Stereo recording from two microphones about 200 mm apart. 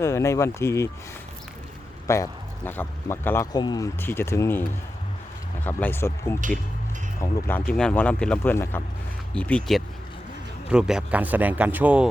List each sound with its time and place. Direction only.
0.0 s speech: 15° left (ahead or behind)
2.0 s speech: 15° left (ahead or behind)
5.6 s speech: 10° left (ahead or behind); by 12.0 s 10° right (ahead or behind)